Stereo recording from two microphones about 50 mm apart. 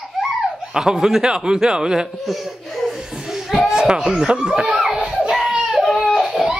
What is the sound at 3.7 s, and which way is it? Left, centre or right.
Speech, centre.